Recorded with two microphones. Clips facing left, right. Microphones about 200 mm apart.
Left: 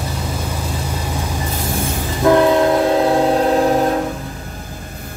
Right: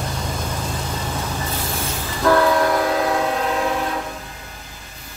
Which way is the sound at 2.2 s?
20° left (ahead or behind).